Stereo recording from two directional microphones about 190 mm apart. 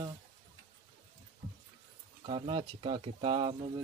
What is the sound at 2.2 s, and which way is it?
Speech, 30° right (ahead or behind).